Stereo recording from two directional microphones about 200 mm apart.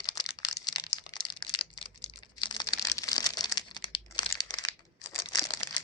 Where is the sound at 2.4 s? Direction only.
25° left (ahead or behind).